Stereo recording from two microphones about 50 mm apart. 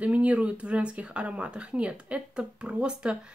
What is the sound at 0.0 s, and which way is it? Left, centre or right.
Speech, right.